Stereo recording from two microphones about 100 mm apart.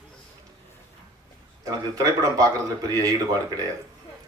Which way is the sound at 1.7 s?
35° right (ahead or behind).